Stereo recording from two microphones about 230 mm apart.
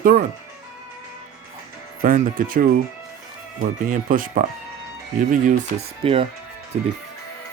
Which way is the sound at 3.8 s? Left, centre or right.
Right.